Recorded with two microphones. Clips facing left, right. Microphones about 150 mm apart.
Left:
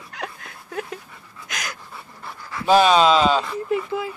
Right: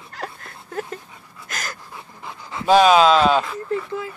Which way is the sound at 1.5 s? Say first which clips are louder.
Right 1 dB; 5° right (ahead or behind).